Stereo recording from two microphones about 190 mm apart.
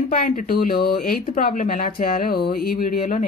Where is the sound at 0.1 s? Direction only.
45° left (ahead or behind).